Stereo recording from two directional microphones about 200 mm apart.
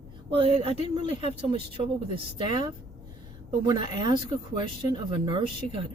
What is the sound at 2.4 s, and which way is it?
Speech, 25° right (ahead or behind).